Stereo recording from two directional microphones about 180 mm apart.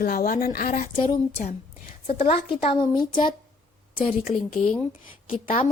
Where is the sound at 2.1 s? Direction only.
35° left (ahead or behind).